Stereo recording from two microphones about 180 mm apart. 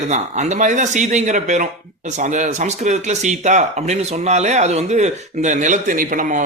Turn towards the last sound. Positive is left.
turn(degrees=-45)  # may be behind; listen again after turning